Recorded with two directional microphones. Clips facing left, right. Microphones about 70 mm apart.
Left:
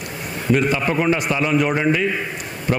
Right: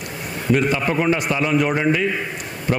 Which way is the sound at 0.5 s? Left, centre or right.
Left.